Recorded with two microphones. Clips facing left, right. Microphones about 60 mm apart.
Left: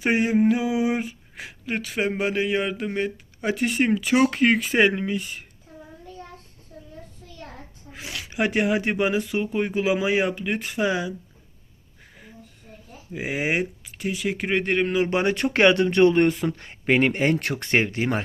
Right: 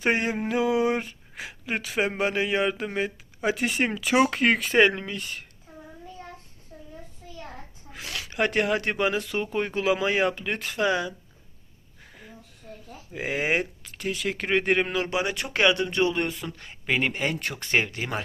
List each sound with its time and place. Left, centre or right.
0.0 s speech: centre
6.7 s child singing: centre
8.1 s speech: centre
12.6 s a sound: centre
13.1 s speech: centre
15.1 s speech: left